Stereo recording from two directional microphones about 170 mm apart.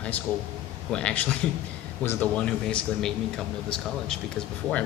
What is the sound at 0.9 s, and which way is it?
Speech, 5° left (ahead or behind).